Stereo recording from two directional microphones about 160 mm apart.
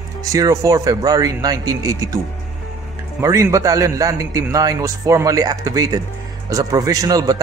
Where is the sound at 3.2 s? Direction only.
20° right (ahead or behind).